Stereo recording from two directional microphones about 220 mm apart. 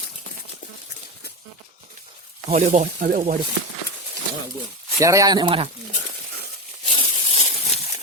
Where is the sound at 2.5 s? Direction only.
35° right (ahead or behind).